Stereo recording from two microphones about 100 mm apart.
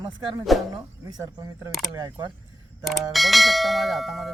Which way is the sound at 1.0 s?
35° right (ahead or behind).